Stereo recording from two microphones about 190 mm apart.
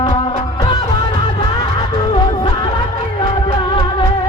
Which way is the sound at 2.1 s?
25° left (ahead or behind).